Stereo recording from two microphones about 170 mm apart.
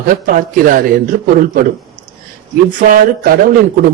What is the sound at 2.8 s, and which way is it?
Speech, 50° right (ahead or behind).